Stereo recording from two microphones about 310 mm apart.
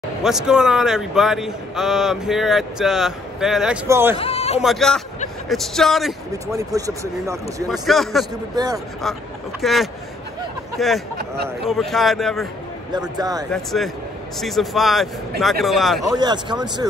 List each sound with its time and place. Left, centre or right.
0.2 s a man's voice: centre
4.2 s a man's voice: centre
4.6 s a man's voice: centre
6.3 s speech: centre
8.5 s speech: centre
9.6 s a man's voice: centre
12.9 s speech: centre
13.5 s a man's voice: centre
16.2 s speech: centre